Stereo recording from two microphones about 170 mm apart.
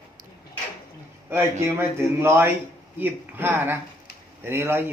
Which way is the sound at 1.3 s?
15° right (ahead or behind).